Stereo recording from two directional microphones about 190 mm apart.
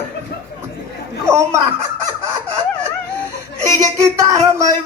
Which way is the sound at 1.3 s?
15° right (ahead or behind).